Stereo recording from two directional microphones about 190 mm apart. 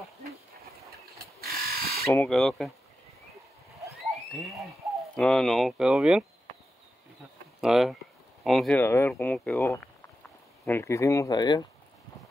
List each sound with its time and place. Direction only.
1.1 s a sound: 55° right (ahead or behind)
2.0 s speech: 10° left (ahead or behind)
2.3 s speech: centre (ahead or behind)
4.3 s speech: centre (ahead or behind)
7.6 s speech: centre (ahead or behind); by 11.6 s 20° left (ahead or behind)